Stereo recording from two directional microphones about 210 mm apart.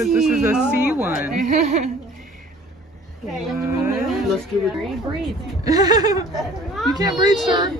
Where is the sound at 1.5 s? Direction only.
35° right (ahead or behind).